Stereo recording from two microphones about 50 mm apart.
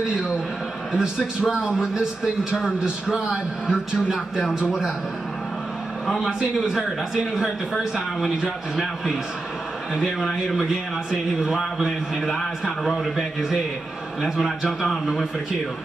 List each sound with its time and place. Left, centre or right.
0.9 s a man's voice: centre
6.0 s a man's voice: centre
7.3 s a man's voice: centre
14.4 s a man's voice: centre